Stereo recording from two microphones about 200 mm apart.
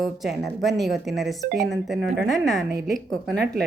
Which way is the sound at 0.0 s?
Centre (ahead or behind).